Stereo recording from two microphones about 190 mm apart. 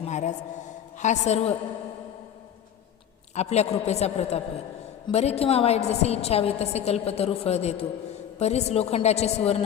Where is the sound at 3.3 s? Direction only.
35° left (ahead or behind).